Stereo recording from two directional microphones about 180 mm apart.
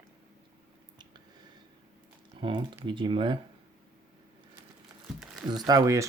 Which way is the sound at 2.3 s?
25° right (ahead or behind).